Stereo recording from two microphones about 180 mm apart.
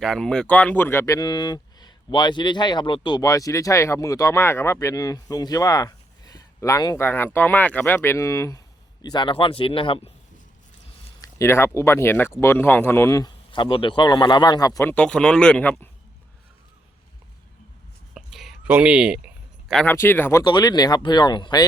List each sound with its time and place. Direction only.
0.0 s speech: 5° left (ahead or behind); by 10.1 s 30° left (ahead or behind)
11.2 s speech: 15° left (ahead or behind)
18.1 s whispering: centre (ahead or behind)
19.6 s speech: 5° left (ahead or behind)
20.4 s speech: 25° left (ahead or behind)